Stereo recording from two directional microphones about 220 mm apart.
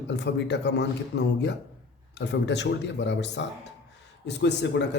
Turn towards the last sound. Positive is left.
turn(degrees=50)  # may be behind; listen again after turning